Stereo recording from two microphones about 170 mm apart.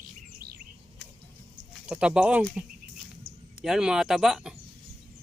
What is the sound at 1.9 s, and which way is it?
Speech, 5° right (ahead or behind).